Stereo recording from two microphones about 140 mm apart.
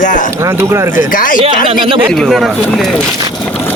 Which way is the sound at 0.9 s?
80° left.